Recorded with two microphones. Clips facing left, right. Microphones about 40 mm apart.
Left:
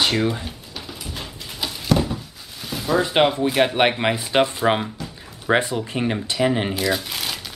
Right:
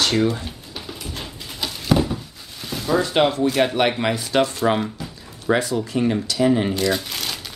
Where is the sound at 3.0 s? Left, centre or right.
Centre.